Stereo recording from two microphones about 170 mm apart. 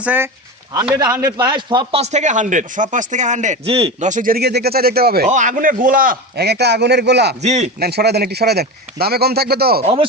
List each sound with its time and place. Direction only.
0.0 s speech: 10° right (ahead or behind)
1.2 s a man's voice: 25° right (ahead or behind)
2.0 s speech: 40° right (ahead or behind)
4.0 s speech: 50° right (ahead or behind)
5.3 s a man's voice: 45° right (ahead or behind); by 7.3 s 80° right
7.4 s a man's voice: 40° right (ahead or behind)
7.8 s a man's voice: 70° right (ahead or behind)
9.8 s a man's voice: 30° right (ahead or behind)